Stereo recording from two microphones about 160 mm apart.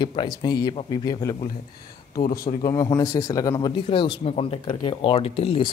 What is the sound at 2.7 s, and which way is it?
A man's voice, 20° left (ahead or behind).